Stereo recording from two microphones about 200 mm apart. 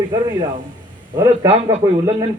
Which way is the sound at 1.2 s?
15° right (ahead or behind).